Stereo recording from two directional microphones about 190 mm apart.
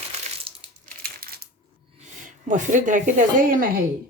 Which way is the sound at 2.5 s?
40° right (ahead or behind).